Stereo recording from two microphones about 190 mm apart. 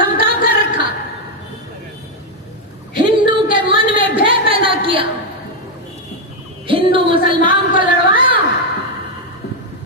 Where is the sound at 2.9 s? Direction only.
25° right (ahead or behind).